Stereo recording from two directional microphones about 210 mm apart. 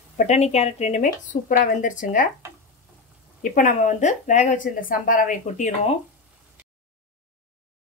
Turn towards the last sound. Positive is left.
turn(degrees=35)  # may be behind; listen again after turning